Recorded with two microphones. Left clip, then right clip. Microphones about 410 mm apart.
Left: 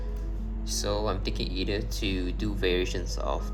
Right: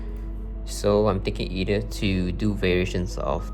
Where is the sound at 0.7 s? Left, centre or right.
Centre.